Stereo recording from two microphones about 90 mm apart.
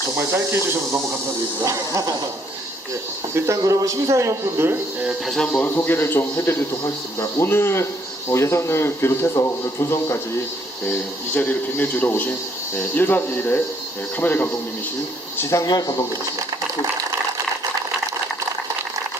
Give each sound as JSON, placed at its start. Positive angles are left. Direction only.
{"t": 0.2, "sound": "speech", "side_deg": -30}
{"t": 3.3, "sound": "speech", "side_deg": -30}
{"t": 5.2, "sound": "speech", "side_deg": 5}
{"t": 5.5, "sound": "speech", "side_deg": 20}
{"t": 11.3, "sound": "speech", "side_deg": 20}
{"t": 15.6, "sound": "speech", "side_deg": 45}